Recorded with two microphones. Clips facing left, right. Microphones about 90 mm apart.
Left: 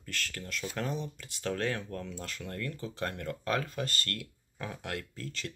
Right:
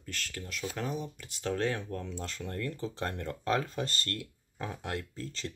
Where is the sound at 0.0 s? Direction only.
20° right (ahead or behind).